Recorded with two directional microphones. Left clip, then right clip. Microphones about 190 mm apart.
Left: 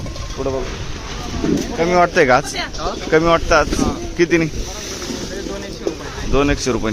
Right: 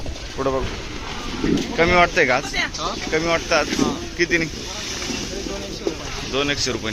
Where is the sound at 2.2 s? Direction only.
55° left (ahead or behind).